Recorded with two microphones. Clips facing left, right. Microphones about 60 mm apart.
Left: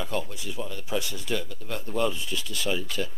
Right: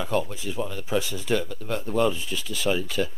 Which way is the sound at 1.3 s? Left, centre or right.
Right.